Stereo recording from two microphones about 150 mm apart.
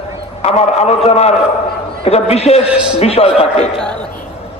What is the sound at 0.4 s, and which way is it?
A man's voice, 45° left (ahead or behind).